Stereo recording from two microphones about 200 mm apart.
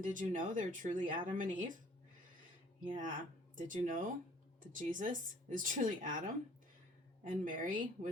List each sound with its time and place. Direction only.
0.0 s speech: 40° right (ahead or behind)
2.8 s speech: 40° right (ahead or behind)